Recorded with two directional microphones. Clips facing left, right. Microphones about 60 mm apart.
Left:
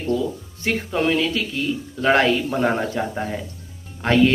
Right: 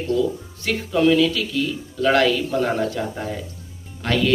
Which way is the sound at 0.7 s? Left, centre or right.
Left.